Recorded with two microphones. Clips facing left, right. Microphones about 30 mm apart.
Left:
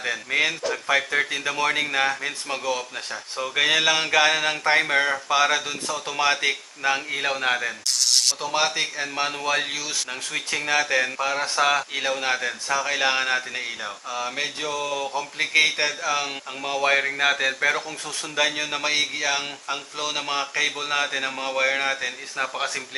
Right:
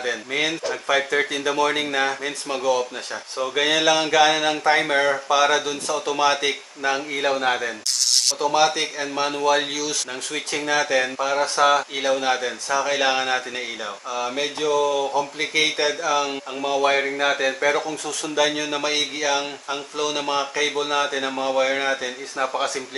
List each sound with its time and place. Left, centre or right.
0.1 s speech: centre
10.3 s speech: centre
12.7 s speech: centre
15.1 s speech: centre
15.6 s speech: centre